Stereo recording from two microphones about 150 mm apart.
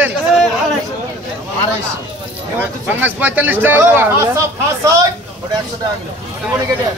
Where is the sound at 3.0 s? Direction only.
10° right (ahead or behind).